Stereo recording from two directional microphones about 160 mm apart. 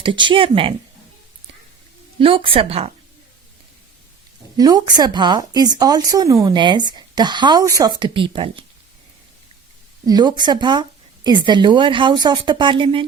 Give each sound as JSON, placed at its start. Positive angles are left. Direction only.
{"t": 0.0, "sound": "speech", "side_deg": -30}
{"t": 2.1, "sound": "speech", "side_deg": -35}
{"t": 4.5, "sound": "speech", "side_deg": -25}
{"t": 10.1, "sound": "speech", "side_deg": -25}